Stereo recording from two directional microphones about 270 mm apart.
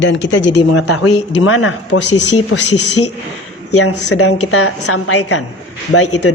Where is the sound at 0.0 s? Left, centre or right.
Left.